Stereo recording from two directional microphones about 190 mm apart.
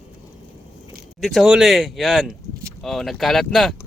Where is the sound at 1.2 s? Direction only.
Centre (ahead or behind).